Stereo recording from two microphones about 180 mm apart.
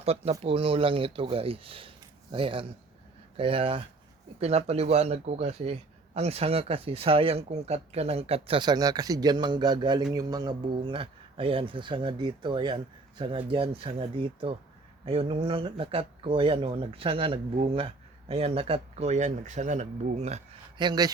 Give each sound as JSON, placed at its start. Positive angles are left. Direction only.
{"t": 0.0, "sound": "speech", "side_deg": -35}
{"t": 20.7, "sound": "speech", "side_deg": -25}